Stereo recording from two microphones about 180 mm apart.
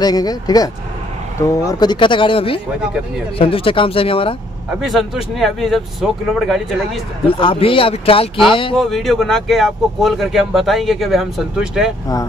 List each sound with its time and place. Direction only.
0.0 s speech: 20° left (ahead or behind)
1.7 s speech: 25° left (ahead or behind)
4.6 s speech: centre (ahead or behind)
7.2 s speech: 30° left (ahead or behind)
8.7 s speech: centre (ahead or behind)